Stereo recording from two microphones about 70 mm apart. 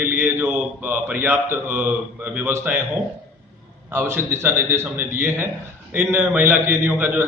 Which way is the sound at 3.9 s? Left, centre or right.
Right.